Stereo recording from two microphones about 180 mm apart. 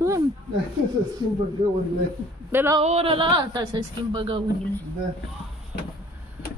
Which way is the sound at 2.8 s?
35° right (ahead or behind).